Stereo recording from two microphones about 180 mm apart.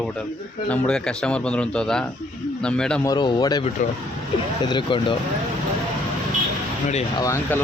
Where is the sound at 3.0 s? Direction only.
20° left (ahead or behind).